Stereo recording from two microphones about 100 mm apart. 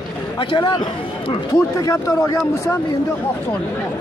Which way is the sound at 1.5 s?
35° left (ahead or behind).